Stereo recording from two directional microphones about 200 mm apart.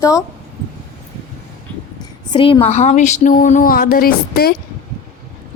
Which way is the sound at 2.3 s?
25° left (ahead or behind).